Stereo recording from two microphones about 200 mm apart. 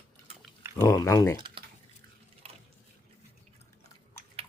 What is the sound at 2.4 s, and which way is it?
Water, 30° right (ahead or behind).